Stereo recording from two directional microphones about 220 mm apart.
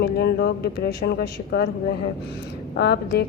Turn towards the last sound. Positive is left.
turn(degrees=50)  # may be behind; listen again after turning